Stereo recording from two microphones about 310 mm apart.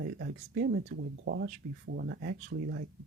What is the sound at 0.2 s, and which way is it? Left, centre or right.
Speech, right.